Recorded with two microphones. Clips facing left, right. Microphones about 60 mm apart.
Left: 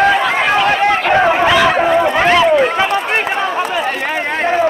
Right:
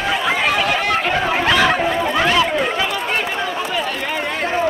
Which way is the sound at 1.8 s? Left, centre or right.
Left.